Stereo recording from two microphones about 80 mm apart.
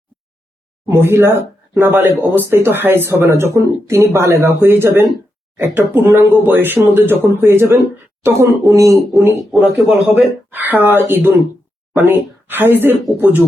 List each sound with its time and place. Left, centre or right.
0.9 s speech: right
9.5 s speech: centre
9.8 s a man's voice: centre
10.5 s speech: right